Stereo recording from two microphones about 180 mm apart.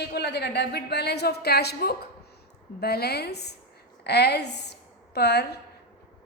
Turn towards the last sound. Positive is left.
turn(degrees=65)  # may be behind; listen again after turning